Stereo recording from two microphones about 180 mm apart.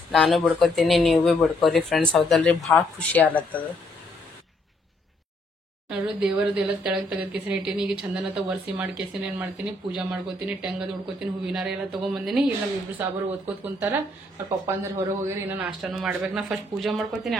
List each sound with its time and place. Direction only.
0.1 s speech: centre (ahead or behind)
5.9 s a man's voice: 5° right (ahead or behind)
13.7 s a man's voice: 10° right (ahead or behind)
15.8 s speech: centre (ahead or behind)